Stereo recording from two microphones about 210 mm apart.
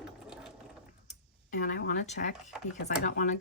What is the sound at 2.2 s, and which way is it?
Speech, 45° left (ahead or behind).